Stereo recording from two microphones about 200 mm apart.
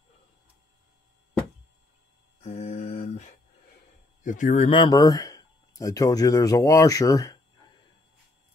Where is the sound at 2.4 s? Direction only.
35° left (ahead or behind).